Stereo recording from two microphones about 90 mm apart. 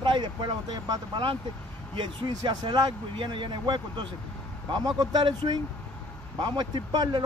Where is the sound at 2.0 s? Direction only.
60° right (ahead or behind).